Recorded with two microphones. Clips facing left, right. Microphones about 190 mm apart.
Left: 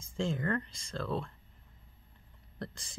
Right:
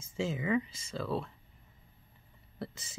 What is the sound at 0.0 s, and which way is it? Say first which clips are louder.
Speech: even; 5° right (ahead or behind).